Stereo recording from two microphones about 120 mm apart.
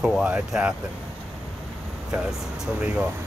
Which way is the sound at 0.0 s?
5° right (ahead or behind).